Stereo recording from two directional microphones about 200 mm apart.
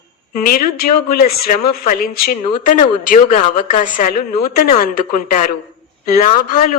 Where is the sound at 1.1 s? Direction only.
45° left (ahead or behind).